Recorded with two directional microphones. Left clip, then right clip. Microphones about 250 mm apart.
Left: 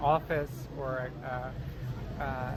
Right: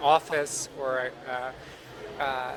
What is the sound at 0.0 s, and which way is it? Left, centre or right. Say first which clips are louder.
Speech: right 5 dB; right.